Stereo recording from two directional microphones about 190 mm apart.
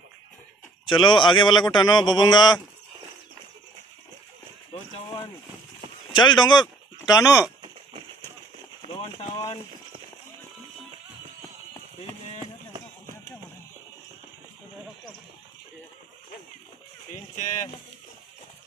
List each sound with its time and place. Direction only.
0.8 s a man's voice: 25° left (ahead or behind)
6.1 s speech: 25° left (ahead or behind)
8.9 s speech: 25° left (ahead or behind)